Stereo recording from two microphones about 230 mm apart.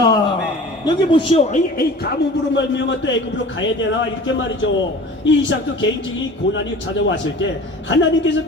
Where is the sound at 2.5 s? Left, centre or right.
Left.